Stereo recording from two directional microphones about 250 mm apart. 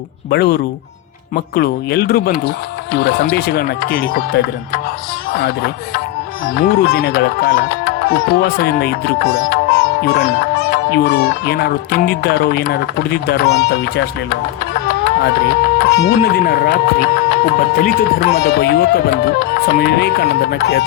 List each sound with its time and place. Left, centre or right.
0.3 s speech: left
15.0 s speech: left